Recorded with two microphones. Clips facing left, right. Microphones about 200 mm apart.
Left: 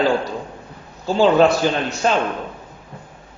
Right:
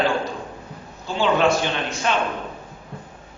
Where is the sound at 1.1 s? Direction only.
35° left (ahead or behind).